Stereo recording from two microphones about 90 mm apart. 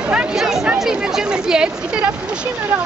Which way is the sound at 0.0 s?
10° right (ahead or behind).